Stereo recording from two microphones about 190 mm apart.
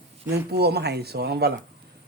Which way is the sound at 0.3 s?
60° right (ahead or behind).